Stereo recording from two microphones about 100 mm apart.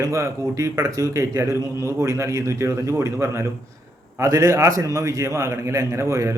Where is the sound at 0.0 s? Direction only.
30° right (ahead or behind).